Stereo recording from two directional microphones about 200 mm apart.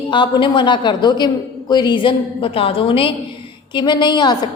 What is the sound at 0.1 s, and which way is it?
A woman's voice, 25° left (ahead or behind).